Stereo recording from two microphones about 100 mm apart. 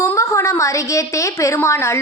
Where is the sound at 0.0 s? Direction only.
30° left (ahead or behind).